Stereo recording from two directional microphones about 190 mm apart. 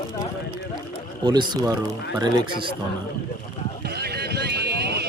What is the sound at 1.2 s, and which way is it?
Speech, 20° right (ahead or behind).